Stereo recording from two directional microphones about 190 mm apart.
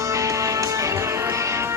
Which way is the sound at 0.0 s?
15° right (ahead or behind).